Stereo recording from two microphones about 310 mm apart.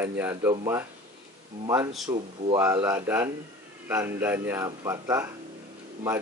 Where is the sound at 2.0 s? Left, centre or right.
Centre.